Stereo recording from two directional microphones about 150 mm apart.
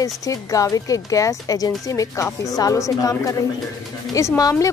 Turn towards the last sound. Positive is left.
turn(degrees=25)  # may be behind; listen again after turning